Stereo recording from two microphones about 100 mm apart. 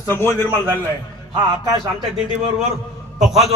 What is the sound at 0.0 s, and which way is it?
Speech, 25° left (ahead or behind).